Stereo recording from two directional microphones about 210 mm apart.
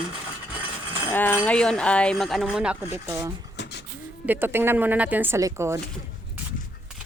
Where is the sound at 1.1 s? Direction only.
10° left (ahead or behind); by 3.3 s 10° right (ahead or behind).